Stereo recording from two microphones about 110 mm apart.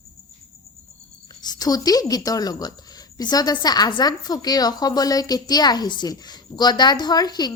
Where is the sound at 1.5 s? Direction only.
35° left (ahead or behind).